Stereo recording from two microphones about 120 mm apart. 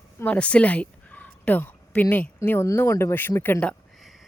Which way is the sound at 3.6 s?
5° left (ahead or behind).